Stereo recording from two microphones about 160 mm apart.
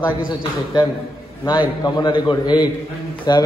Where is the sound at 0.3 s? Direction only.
25° left (ahead or behind).